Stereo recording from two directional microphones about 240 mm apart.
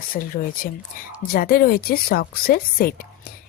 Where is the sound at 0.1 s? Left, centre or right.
Left.